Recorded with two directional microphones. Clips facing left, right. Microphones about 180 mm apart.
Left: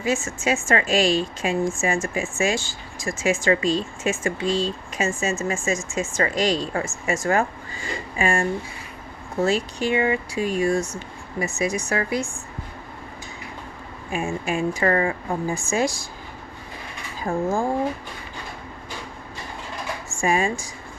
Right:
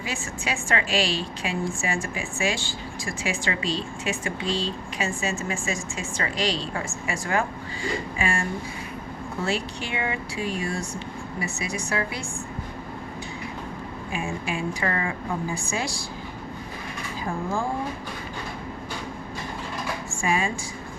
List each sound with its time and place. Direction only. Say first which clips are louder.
0.0 s a woman's voice: left 8 dB; 45° left (ahead or behind)
14.1 s a woman's voice: left 5 dB; 45° left (ahead or behind)
17.3 s a woman's voice: left 6 dB; 45° left (ahead or behind)
20.1 s dishes: left 4 dB; 45° left (ahead or behind)